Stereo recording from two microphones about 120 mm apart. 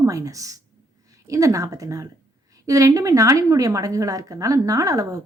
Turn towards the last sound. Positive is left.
turn(degrees=-30)  # may be behind; listen again after turning